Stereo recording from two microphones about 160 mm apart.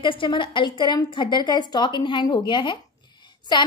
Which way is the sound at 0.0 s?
30° left (ahead or behind).